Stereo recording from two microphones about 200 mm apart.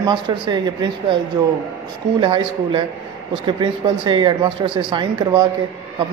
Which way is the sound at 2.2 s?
25° right (ahead or behind).